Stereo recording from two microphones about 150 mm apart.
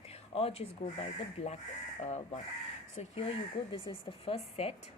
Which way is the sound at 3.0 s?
40° left (ahead or behind).